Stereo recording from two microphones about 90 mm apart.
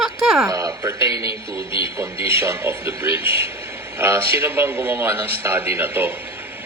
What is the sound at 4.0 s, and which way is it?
A man's voice, 25° right (ahead or behind).